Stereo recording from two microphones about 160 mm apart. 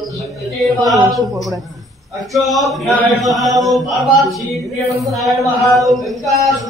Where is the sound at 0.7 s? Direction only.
25° right (ahead or behind).